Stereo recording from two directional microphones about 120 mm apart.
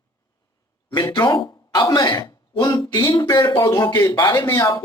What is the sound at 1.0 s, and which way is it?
Speech, 35° left (ahead or behind).